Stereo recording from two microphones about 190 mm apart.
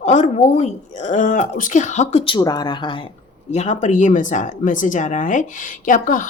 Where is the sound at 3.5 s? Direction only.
40° left (ahead or behind).